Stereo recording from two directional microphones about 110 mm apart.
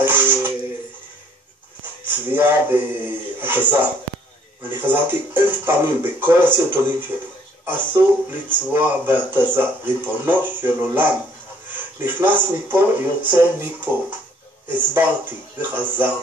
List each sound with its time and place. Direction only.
0.0 s speech: 20° right (ahead or behind)
2.0 s speech: 15° right (ahead or behind)
4.6 s speech: 20° right (ahead or behind)